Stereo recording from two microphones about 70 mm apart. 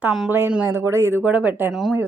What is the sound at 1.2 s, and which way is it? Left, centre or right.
Speech, right.